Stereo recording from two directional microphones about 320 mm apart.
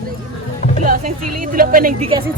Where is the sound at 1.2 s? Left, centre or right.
Right.